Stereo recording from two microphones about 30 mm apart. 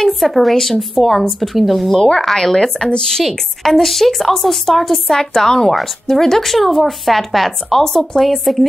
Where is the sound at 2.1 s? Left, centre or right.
Centre.